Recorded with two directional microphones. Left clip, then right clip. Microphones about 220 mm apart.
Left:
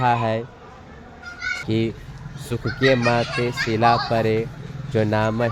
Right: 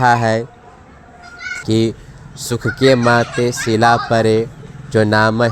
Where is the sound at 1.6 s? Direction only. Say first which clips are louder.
Right 7 dB; 30° right (ahead or behind).